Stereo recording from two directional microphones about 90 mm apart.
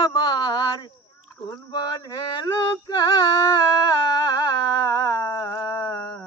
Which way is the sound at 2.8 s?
45° left (ahead or behind).